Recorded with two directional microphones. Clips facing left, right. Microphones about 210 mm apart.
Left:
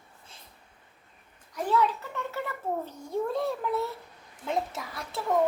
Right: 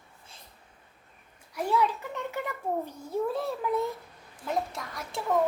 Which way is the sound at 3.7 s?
15° right (ahead or behind).